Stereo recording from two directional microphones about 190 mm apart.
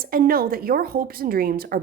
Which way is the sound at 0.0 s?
50° right (ahead or behind).